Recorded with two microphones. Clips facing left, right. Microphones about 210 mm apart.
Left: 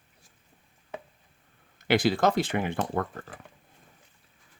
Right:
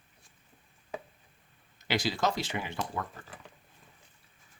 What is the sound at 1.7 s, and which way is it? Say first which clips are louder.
Speech: left 8 dB; 55° left (ahead or behind).